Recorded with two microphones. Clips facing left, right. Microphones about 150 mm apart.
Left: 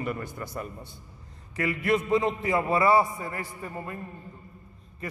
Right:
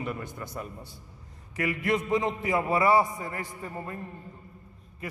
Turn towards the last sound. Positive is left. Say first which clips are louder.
# even
turn(degrees=-25)  # may be behind; listen again after turning